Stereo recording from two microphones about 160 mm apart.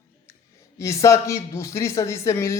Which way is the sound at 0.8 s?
20° left (ahead or behind).